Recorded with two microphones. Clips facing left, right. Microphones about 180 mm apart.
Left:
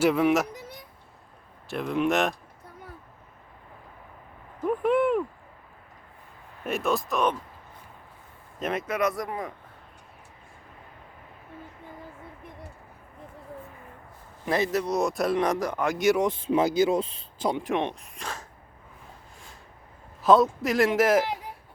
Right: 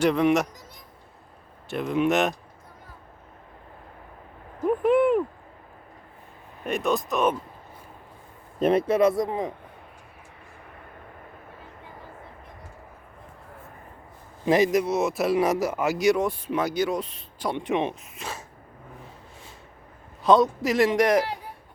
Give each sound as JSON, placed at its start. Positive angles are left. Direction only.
{"t": 0.0, "sound": "speech", "side_deg": 5}
{"t": 0.5, "sound": "a sound", "side_deg": 60}
{"t": 1.6, "sound": "speech", "side_deg": 0}
{"t": 4.6, "sound": "a sound", "side_deg": -5}
{"t": 6.7, "sound": "speech", "side_deg": 0}
{"t": 8.5, "sound": "speech", "side_deg": -30}
{"t": 14.4, "sound": "speech", "side_deg": -15}
{"t": 16.1, "sound": "speech", "side_deg": 20}
{"t": 17.6, "sound": "speech", "side_deg": 0}
{"t": 20.2, "sound": "speech", "side_deg": 0}